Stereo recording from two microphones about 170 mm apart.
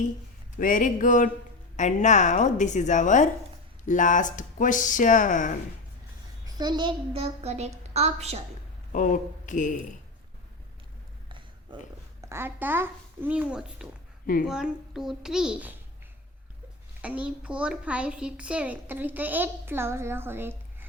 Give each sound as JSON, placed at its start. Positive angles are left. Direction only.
{"t": 0.6, "sound": "speech", "side_deg": 50}
{"t": 6.4, "sound": "a child's voice", "side_deg": -25}
{"t": 8.9, "sound": "speech", "side_deg": 50}
{"t": 11.3, "sound": "a sound", "side_deg": -30}
{"t": 12.2, "sound": "a woman's voice", "side_deg": -15}
{"t": 17.0, "sound": "a woman's voice", "side_deg": -5}